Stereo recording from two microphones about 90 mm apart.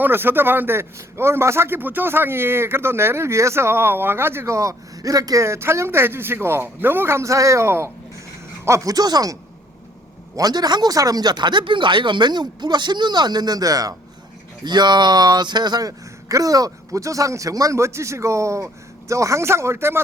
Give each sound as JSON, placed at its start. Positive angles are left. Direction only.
{"t": 0.0, "sound": "a man's voice", "side_deg": -25}
{"t": 14.6, "sound": "speech", "side_deg": -55}